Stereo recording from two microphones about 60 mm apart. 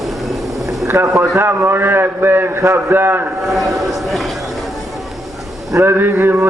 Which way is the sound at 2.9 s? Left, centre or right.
Right.